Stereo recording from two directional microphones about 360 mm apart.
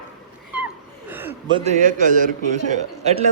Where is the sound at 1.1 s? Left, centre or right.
Centre.